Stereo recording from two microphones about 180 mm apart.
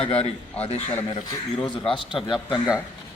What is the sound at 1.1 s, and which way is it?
Speech, 25° left (ahead or behind).